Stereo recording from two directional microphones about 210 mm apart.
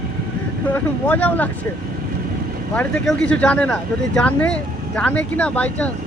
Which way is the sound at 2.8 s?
5° left (ahead or behind).